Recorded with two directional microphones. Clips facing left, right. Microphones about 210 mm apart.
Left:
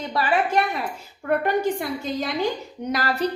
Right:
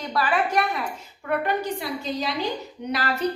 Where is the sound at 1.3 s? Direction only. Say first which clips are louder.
Left 4 dB; 45° left (ahead or behind).